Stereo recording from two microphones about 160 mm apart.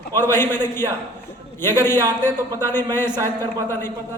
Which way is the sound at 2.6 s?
15° left (ahead or behind).